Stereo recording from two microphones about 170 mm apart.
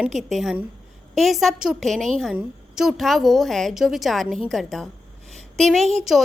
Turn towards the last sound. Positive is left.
turn(degrees=0)  # may be behind; listen again after turning